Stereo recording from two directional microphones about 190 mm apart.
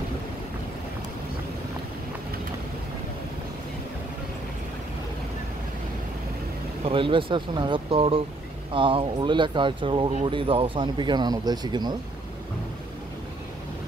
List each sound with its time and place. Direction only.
6.8 s speech: 25° right (ahead or behind)